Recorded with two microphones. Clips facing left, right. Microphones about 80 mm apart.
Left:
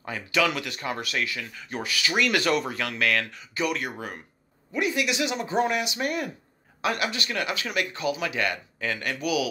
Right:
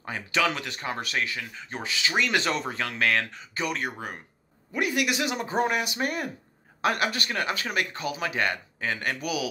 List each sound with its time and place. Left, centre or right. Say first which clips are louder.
0.0 s speech: left 1 dB; right
4.7 s speech: even; right